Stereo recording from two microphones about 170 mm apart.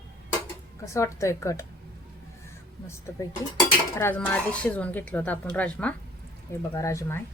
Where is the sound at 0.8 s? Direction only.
15° left (ahead or behind).